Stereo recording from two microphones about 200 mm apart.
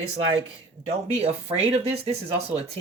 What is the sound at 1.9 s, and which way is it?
Speech, 30° right (ahead or behind).